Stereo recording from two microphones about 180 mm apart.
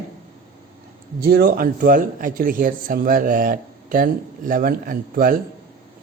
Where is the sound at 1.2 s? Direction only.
60° right (ahead or behind).